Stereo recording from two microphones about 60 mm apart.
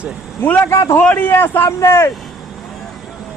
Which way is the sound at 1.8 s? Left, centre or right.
Left.